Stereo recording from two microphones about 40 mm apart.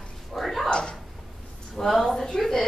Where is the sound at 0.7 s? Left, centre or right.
Left.